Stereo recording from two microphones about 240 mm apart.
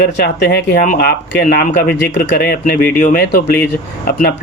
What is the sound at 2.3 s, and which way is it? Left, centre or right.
Speech, left.